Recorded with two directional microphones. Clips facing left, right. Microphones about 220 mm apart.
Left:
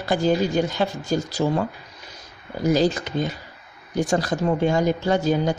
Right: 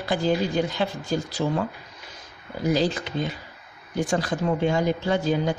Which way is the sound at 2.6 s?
45° left (ahead or behind).